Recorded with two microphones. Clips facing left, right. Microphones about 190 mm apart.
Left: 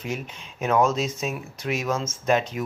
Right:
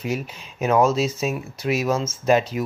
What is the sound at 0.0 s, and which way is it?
Speech, 5° right (ahead or behind).